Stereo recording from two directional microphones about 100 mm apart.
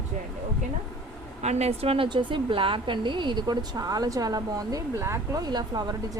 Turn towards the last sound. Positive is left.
turn(degrees=-45)  # may be behind; listen again after turning